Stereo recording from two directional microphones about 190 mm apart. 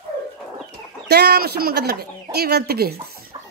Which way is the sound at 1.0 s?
60° right (ahead or behind).